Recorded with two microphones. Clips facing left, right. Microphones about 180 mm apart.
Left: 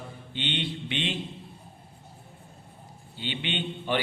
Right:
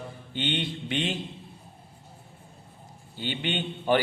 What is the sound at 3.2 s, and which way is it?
Speech, 45° right (ahead or behind).